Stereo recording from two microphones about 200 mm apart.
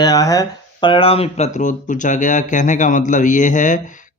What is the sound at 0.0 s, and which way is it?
Speech, 20° left (ahead or behind).